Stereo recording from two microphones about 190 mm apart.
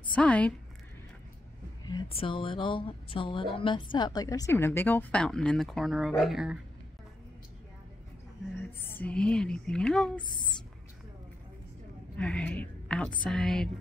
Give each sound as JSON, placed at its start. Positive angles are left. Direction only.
{"t": 0.1, "sound": "a woman's voice", "side_deg": 5}
{"t": 1.9, "sound": "a woman's voice", "side_deg": 25}
{"t": 8.8, "sound": "a woman's voice", "side_deg": 10}
{"t": 12.2, "sound": "a woman's voice", "side_deg": 5}